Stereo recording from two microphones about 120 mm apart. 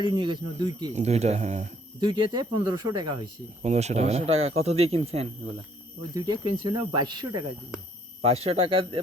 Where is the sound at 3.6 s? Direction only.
65° right (ahead or behind).